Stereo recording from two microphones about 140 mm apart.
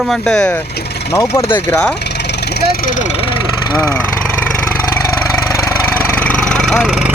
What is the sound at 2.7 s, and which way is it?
Speech, 90° left.